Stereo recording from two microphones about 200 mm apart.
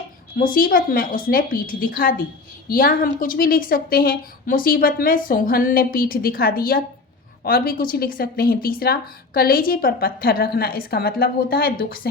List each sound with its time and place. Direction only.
0.3 s a woman's voice: 45° left (ahead or behind)